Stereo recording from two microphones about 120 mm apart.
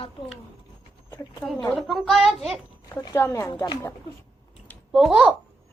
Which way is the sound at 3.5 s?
35° left (ahead or behind).